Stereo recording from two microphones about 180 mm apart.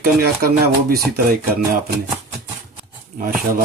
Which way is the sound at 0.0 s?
60° right (ahead or behind).